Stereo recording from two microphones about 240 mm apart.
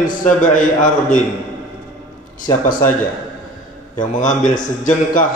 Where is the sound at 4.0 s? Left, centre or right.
Left.